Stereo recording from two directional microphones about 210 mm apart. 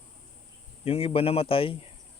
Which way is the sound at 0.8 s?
25° left (ahead or behind).